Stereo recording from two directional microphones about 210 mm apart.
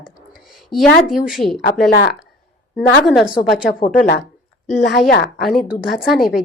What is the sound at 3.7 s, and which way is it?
Speech, 40° left (ahead or behind).